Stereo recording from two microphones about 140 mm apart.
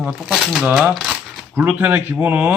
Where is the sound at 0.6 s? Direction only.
15° right (ahead or behind).